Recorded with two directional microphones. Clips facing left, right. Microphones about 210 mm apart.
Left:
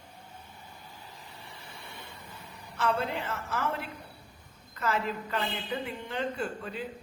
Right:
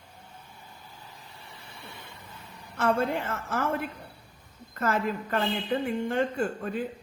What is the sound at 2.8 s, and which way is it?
A woman's voice, 50° right (ahead or behind).